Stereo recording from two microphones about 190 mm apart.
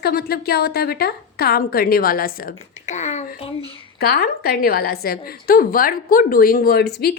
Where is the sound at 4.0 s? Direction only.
55° left (ahead or behind).